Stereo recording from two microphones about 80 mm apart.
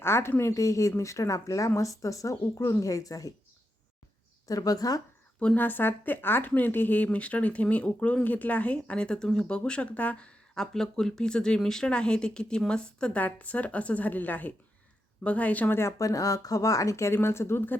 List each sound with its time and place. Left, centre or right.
0.0 s a woman's voice: left
2.6 s a woman's voice: left
2.8 s speech: left
4.4 s speech: left
5.5 s speech: left
15.8 s a woman's voice: left